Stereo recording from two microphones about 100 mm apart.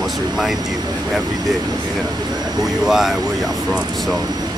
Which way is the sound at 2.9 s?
5° right (ahead or behind).